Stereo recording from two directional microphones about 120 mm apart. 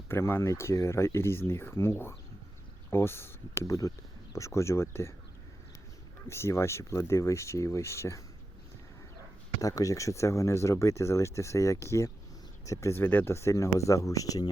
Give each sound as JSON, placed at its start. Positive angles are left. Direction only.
{"t": 0.1, "sound": "speech", "side_deg": 20}
{"t": 6.2, "sound": "speech", "side_deg": 25}
{"t": 9.6, "sound": "speech", "side_deg": 30}